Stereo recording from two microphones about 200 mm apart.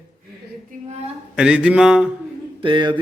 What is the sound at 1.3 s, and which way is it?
Speech, 5° right (ahead or behind).